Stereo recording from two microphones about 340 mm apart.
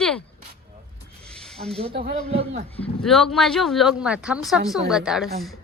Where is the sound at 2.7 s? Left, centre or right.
Centre.